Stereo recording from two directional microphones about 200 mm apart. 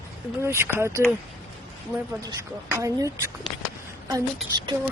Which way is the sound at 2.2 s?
15° right (ahead or behind).